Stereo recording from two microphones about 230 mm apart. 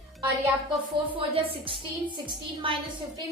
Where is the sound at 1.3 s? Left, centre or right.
Right.